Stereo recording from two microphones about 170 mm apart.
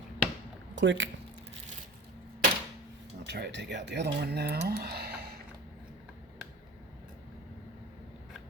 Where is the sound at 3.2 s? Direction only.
90° right; by 5.3 s 70° right (ahead or behind).